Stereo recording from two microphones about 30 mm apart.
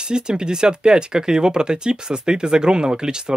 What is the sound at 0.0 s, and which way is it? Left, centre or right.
Speech, right.